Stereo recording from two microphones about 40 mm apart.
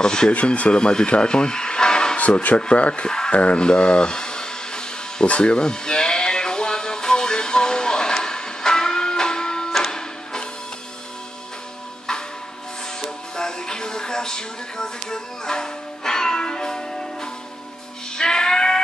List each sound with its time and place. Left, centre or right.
0.0 s speech: centre
0.3 s speech: left
3.6 s music: left
12.1 s music: centre